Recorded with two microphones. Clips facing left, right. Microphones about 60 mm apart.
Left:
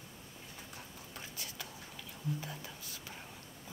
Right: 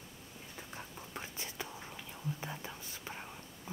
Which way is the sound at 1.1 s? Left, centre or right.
Right.